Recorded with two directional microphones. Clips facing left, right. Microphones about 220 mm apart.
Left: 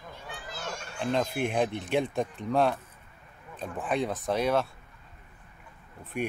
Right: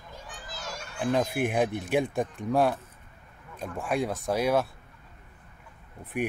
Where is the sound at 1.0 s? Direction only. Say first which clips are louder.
Right 2 dB; 15° right (ahead or behind).